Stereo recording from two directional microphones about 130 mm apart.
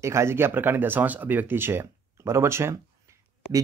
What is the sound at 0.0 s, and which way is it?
Speech, 20° right (ahead or behind).